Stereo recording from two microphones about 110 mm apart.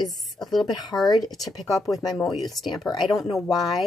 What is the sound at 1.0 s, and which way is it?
Speech, 35° left (ahead or behind).